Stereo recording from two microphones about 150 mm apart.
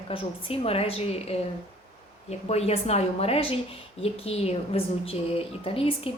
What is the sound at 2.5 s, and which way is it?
A woman's voice, 45° left (ahead or behind).